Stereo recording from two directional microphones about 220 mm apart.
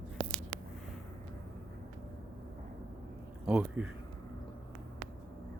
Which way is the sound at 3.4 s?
5° right (ahead or behind).